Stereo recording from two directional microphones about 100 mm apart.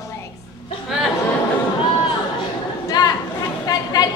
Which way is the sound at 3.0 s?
45° left (ahead or behind).